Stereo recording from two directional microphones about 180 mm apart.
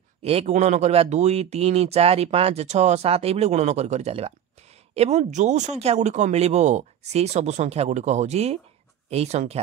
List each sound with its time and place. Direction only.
0.2 s speech: 35° right (ahead or behind)